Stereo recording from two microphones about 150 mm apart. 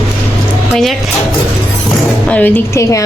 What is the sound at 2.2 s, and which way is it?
Speech, 10° left (ahead or behind).